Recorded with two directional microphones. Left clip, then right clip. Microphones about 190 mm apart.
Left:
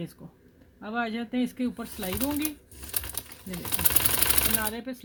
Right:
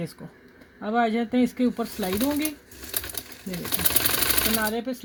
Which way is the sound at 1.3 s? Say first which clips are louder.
Right 6 dB; 15° right (ahead or behind).